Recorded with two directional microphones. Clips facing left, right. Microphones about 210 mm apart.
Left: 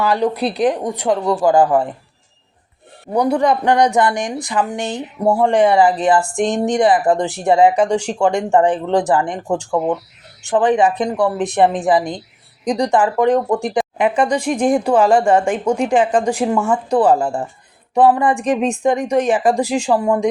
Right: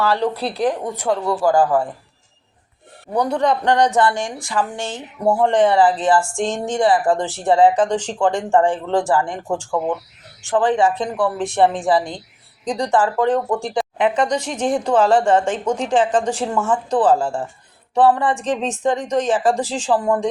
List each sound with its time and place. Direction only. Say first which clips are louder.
0.0 s speech: left 2 dB; 15° left (ahead or behind)
3.1 s speech: left 3 dB; 10° left (ahead or behind)